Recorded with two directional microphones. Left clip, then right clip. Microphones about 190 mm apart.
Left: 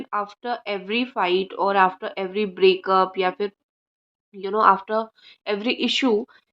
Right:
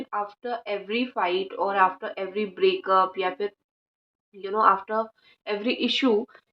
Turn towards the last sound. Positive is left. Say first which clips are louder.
# left 2 dB
turn(degrees=30)  # may be behind; listen again after turning